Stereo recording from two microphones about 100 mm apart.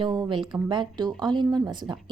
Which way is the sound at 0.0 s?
50° right (ahead or behind).